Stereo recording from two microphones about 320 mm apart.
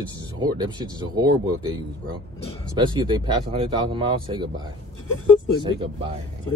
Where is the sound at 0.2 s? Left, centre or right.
Centre.